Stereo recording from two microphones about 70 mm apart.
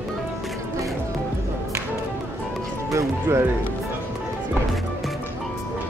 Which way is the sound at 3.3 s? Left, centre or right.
Right.